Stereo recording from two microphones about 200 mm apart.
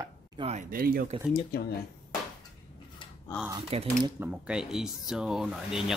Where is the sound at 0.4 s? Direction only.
35° right (ahead or behind).